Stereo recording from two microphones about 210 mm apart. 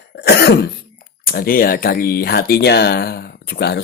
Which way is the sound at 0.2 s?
50° left (ahead or behind).